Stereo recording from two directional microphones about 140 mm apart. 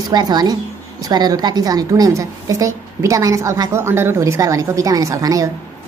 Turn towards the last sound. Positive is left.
turn(degrees=-25)  # may be behind; listen again after turning